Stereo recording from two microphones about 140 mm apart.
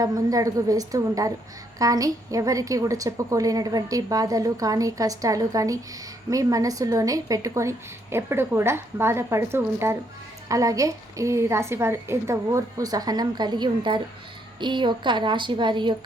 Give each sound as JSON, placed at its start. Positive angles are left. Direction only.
{"t": 0.0, "sound": "a woman's voice", "side_deg": -25}